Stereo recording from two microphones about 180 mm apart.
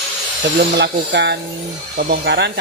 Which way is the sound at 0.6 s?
70° right (ahead or behind).